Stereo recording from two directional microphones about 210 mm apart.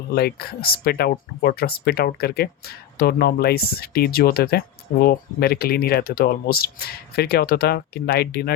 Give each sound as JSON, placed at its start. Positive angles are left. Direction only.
{"t": 0.1, "sound": "speech", "side_deg": 50}